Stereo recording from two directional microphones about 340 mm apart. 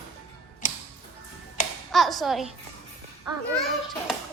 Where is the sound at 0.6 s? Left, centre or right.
Left.